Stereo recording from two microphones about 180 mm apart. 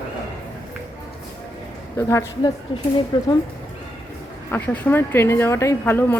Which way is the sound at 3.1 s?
25° left (ahead or behind).